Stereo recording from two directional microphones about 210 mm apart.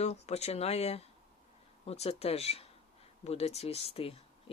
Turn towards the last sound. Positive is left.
turn(degrees=30)  # may be behind; listen again after turning